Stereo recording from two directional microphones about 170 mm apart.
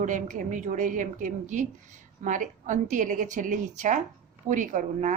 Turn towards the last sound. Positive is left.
turn(degrees=-45)  # may be behind; listen again after turning